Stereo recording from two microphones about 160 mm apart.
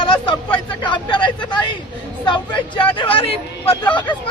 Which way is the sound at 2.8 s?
35° left (ahead or behind).